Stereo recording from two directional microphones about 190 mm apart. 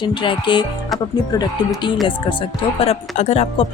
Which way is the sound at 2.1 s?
25° left (ahead or behind).